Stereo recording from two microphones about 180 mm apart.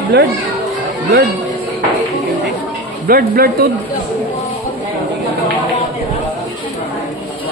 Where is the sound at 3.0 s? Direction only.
60° right (ahead or behind).